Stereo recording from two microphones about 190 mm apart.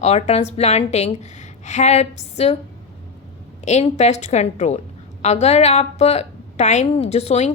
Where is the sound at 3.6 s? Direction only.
35° left (ahead or behind).